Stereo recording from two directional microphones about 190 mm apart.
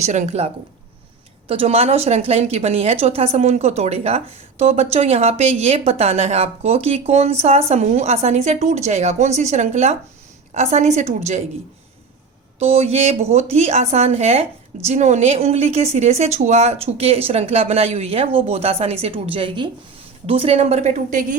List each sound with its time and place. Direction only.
0.0 s speech: 40° right (ahead or behind)
12.5 s a woman's voice: 35° right (ahead or behind)